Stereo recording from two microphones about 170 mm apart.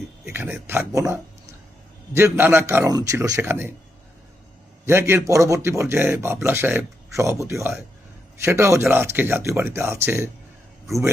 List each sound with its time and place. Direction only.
0.3 s speech: 10° right (ahead or behind)
2.1 s speech: 15° right (ahead or behind)
4.9 s speech: 15° right (ahead or behind)